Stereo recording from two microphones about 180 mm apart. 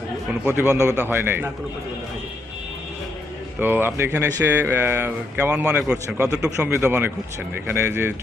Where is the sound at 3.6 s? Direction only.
10° right (ahead or behind).